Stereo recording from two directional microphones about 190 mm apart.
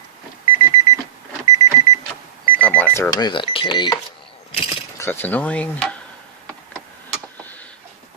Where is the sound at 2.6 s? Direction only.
5° left (ahead or behind); by 3.9 s 25° left (ahead or behind).